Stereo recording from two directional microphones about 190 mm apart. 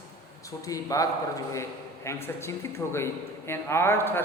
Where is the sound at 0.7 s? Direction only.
15° left (ahead or behind).